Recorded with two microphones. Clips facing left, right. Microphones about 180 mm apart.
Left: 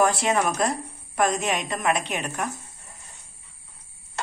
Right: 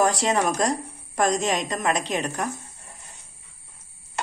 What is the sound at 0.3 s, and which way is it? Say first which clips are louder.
Speech: right 1 dB; 35° right (ahead or behind).